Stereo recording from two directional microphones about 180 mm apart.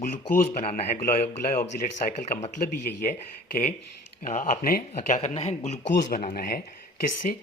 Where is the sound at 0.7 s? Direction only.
55° left (ahead or behind).